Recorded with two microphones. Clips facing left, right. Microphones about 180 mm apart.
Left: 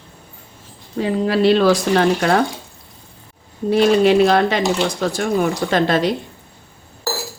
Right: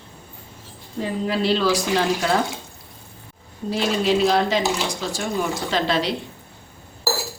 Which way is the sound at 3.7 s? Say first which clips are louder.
Left 8 dB; 60° left (ahead or behind).